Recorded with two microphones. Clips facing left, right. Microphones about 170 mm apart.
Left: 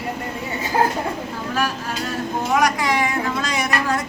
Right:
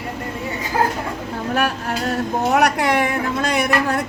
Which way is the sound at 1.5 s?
60° right (ahead or behind).